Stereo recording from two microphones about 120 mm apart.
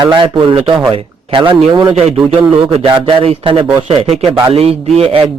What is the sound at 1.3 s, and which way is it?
A man's voice, 45° right (ahead or behind).